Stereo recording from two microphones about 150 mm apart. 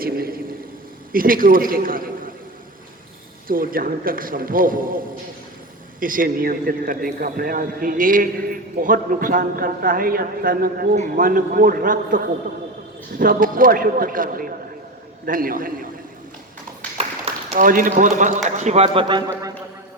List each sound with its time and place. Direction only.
0.0 s a sound: 80° right
1.1 s a man's voice: 70° right (ahead or behind)
3.4 s speech: 70° right (ahead or behind)
6.0 s speech: 65° right (ahead or behind)
10.9 s speech: 60° right (ahead or behind)
17.5 s a man's voice: 65° right (ahead or behind); by 19.2 s 35° right (ahead or behind)
19.3 s a man's voice: 20° right (ahead or behind)